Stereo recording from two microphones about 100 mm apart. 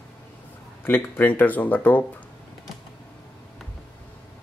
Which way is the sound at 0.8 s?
20° left (ahead or behind).